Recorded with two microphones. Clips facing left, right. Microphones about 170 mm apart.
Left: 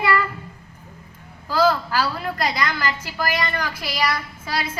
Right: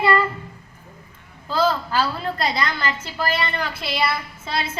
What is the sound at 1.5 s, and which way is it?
A woman's voice, 25° right (ahead or behind).